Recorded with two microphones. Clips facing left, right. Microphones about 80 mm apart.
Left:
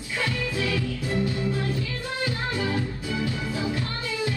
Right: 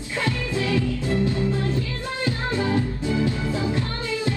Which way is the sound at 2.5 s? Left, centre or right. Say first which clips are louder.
Right 4 dB; right.